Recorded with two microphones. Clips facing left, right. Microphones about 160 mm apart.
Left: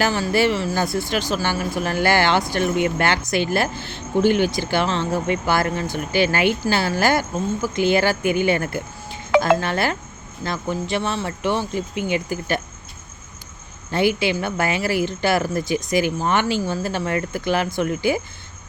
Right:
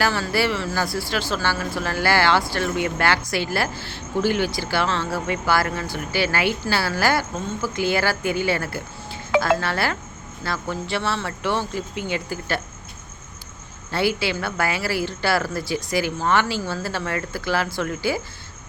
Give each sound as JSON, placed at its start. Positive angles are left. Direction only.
{"t": 0.0, "sound": "speech", "side_deg": 15}
{"t": 13.9, "sound": "speech", "side_deg": 20}